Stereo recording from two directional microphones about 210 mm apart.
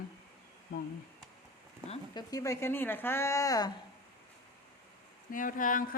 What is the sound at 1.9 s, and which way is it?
Speech, 20° left (ahead or behind).